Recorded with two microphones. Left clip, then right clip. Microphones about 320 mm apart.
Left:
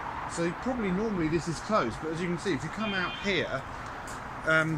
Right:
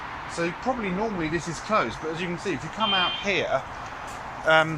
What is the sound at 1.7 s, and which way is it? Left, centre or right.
Speech, centre.